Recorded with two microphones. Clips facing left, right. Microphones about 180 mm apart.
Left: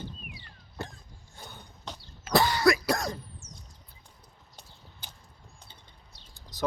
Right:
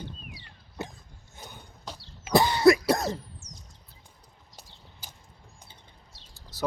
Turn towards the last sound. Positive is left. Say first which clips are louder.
# even
turn(degrees=15)  # may be behind; listen again after turning